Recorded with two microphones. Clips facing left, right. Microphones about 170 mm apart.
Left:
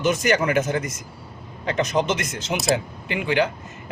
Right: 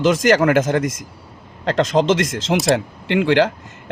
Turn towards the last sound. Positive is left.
turn(degrees=-90)